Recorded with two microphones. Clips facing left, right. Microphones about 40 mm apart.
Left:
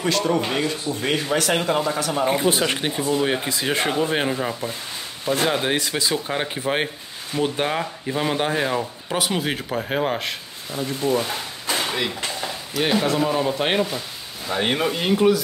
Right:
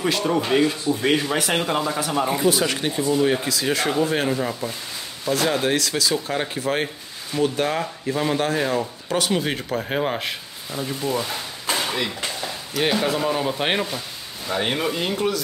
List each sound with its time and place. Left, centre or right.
0.0 s speech: centre
2.0 s speech: centre
2.2 s speech: left
4.3 s speech: centre
5.2 s speech: left
6.1 s speech: centre
11.0 s speech: left
11.7 s speech: centre
14.5 s speech: centre